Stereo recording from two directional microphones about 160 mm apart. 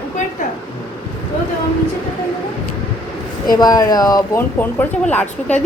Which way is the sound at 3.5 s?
25° left (ahead or behind).